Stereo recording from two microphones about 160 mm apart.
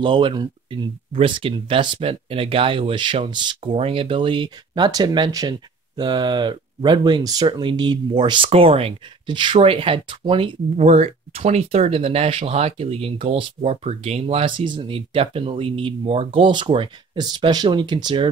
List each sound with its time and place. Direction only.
0.0 s speech: 30° right (ahead or behind)